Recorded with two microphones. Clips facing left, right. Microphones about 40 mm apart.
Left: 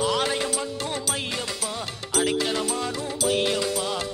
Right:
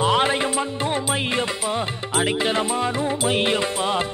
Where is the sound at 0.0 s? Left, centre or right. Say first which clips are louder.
Right 5 dB; right.